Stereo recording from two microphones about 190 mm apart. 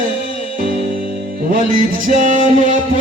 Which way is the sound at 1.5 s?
45° right (ahead or behind).